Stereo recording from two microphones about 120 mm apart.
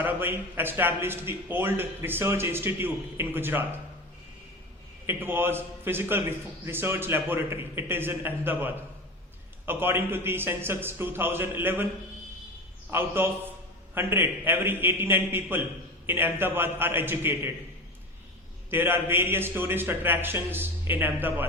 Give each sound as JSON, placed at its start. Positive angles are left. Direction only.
{"t": 0.0, "sound": "a man's voice", "side_deg": -15}
{"t": 5.0, "sound": "a man's voice", "side_deg": -20}
{"t": 12.9, "sound": "a man's voice", "side_deg": -20}
{"t": 18.7, "sound": "a man's voice", "side_deg": -15}